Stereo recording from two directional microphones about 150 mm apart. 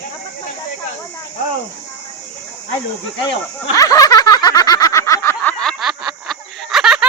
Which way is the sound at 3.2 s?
25° left (ahead or behind).